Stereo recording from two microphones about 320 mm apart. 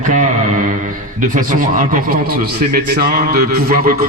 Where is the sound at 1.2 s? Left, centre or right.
Right.